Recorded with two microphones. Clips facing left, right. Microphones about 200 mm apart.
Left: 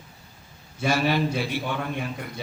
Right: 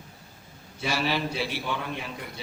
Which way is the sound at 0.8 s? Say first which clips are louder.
Left 5 dB; 50° left (ahead or behind).